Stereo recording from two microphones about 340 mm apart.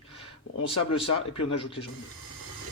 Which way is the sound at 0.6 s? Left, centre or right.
Left.